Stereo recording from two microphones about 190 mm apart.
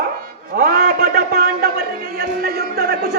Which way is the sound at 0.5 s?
55° right (ahead or behind).